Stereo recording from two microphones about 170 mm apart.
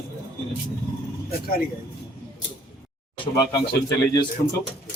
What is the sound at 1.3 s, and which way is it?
Speech, 60° left (ahead or behind).